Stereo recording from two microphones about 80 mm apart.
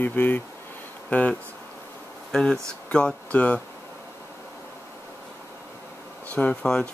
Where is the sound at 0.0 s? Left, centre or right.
Left.